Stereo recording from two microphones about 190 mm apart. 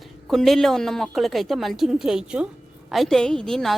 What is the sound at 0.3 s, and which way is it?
A woman's voice, centre (ahead or behind).